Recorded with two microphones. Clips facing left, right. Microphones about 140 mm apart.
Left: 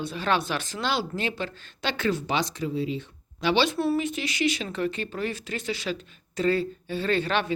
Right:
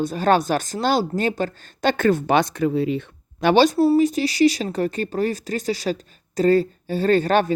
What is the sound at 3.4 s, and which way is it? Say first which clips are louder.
Speech: right 8 dB; 45° right (ahead or behind).